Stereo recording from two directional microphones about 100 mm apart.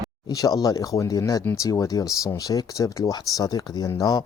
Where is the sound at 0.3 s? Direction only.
40° left (ahead or behind).